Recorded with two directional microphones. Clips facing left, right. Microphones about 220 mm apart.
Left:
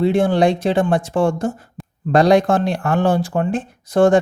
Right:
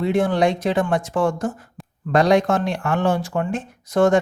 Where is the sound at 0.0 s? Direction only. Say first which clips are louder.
Left 3 dB; 30° left (ahead or behind).